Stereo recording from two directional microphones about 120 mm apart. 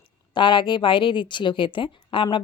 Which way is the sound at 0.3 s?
40° left (ahead or behind).